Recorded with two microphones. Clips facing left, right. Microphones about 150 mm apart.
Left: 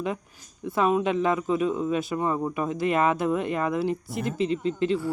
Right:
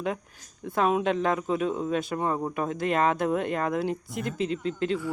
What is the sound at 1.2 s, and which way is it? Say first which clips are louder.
Speech: left 2 dB; centre (ahead or behind).